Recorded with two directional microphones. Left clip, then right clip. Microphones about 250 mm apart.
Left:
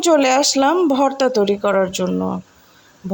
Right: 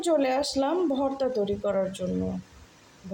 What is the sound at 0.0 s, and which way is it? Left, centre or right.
Speech, left.